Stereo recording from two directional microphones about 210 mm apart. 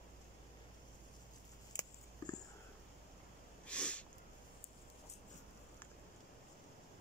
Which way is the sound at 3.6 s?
5° left (ahead or behind).